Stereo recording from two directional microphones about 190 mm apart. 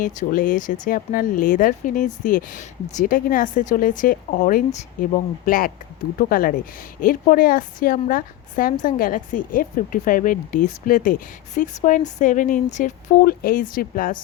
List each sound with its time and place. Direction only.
0.0 s a woman's voice: 45° left (ahead or behind)